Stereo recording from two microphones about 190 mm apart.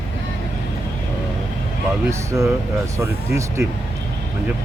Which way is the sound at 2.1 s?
15° right (ahead or behind).